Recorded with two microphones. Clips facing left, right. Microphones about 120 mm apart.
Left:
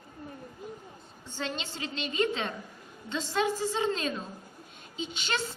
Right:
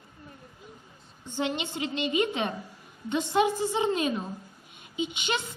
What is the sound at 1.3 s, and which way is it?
A woman's voice, 20° right (ahead or behind).